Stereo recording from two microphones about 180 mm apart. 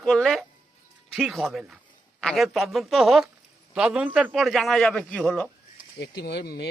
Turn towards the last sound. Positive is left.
turn(degrees=65)  # may be behind; listen again after turning